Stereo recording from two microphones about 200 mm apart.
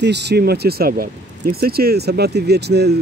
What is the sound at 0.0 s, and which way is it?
Speech, 55° right (ahead or behind).